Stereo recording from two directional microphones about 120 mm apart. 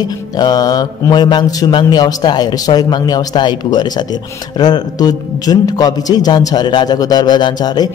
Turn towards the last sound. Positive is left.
turn(degrees=35)  # may be behind; listen again after turning